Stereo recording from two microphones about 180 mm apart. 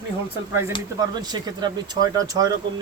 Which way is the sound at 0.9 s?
25° right (ahead or behind).